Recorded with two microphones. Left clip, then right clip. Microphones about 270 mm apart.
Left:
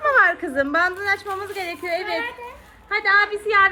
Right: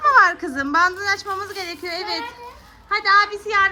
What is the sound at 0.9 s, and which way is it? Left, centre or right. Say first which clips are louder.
Speech: right 1 dB; centre.